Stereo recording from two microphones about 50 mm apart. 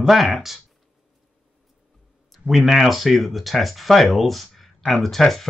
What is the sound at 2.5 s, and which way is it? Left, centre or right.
Speech, centre.